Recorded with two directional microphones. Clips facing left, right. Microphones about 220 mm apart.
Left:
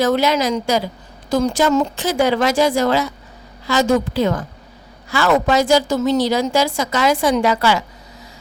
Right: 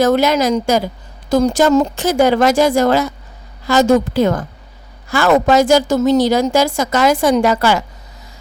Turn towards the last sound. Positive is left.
turn(degrees=-45)  # may be behind; listen again after turning